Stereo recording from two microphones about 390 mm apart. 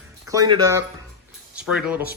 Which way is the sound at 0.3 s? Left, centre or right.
Centre.